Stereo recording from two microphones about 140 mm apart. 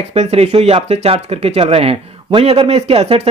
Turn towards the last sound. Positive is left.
turn(degrees=-45)  # may be behind; listen again after turning